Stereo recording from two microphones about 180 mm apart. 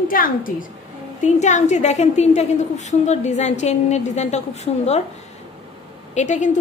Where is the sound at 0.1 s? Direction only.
50° left (ahead or behind).